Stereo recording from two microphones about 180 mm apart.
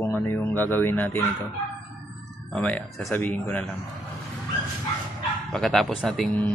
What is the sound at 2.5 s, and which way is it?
Speech, 5° left (ahead or behind).